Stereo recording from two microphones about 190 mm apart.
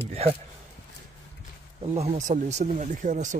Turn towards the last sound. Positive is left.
turn(degrees=-40)  # may be behind; listen again after turning